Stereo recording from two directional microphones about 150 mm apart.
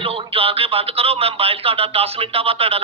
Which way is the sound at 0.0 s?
40° right (ahead or behind).